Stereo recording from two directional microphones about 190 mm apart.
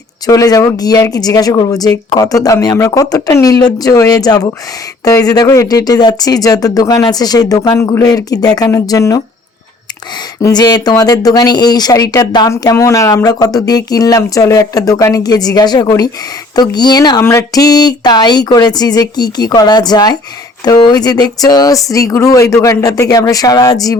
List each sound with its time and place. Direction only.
0.3 s speech: 20° left (ahead or behind)
10.4 s speech: 20° left (ahead or behind)